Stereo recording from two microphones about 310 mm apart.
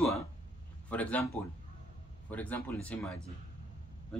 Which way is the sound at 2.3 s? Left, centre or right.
Centre.